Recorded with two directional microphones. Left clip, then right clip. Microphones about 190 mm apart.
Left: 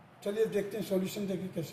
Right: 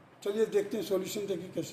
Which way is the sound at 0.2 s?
45° right (ahead or behind).